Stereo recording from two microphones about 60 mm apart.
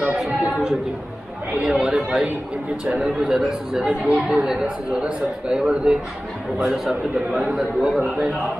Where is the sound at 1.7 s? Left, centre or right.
Centre.